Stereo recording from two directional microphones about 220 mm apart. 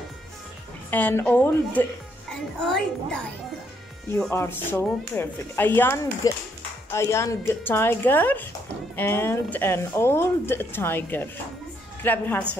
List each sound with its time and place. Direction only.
0.8 s a woman's voice: 10° left (ahead or behind)